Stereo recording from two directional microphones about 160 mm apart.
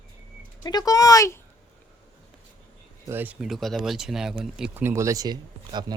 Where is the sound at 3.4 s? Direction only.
Centre (ahead or behind).